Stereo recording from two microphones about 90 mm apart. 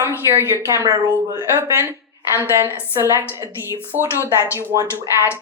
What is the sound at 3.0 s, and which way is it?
Speech, 35° right (ahead or behind).